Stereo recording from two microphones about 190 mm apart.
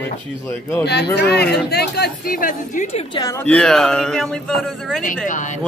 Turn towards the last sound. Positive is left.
turn(degrees=45)  # may be behind; listen again after turning